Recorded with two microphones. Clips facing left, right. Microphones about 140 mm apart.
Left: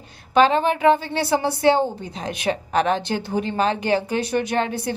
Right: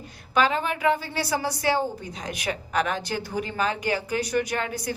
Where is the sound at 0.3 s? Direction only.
30° left (ahead or behind).